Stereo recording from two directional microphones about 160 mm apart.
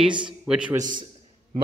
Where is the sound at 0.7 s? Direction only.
25° right (ahead or behind).